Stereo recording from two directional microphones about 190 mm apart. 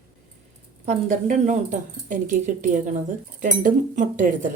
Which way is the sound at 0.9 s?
40° right (ahead or behind).